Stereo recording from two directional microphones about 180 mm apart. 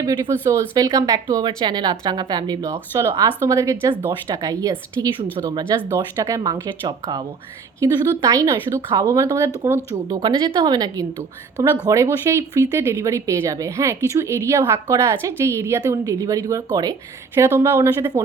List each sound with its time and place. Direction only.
0.0 s a woman's voice: 20° right (ahead or behind)
10.2 s a woman's voice: 25° right (ahead or behind)